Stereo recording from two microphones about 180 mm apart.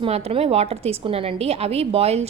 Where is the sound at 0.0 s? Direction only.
35° right (ahead or behind).